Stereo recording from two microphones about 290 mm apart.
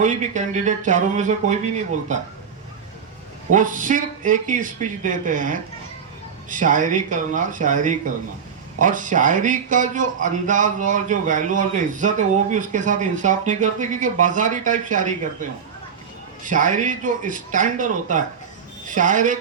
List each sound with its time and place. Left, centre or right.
0.0 s speech: right
3.5 s speech: right